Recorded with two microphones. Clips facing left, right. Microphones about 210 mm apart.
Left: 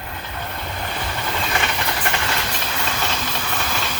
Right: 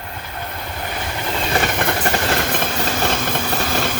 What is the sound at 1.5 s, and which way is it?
Vehicle, 50° right (ahead or behind).